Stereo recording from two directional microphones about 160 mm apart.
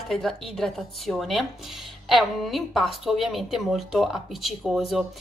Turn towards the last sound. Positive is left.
turn(degrees=0)  # may be behind; listen again after turning